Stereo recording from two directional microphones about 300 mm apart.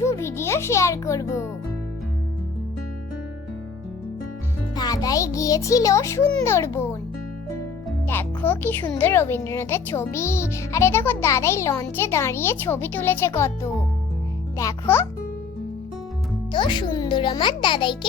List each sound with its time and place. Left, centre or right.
0.0 s speech: centre
4.7 s speech: centre
7.9 s speech: centre
16.5 s speech: centre